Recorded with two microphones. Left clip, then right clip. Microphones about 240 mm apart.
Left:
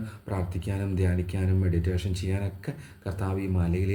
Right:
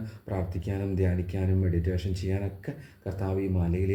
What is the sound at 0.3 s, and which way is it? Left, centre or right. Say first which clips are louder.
Speech: even; left.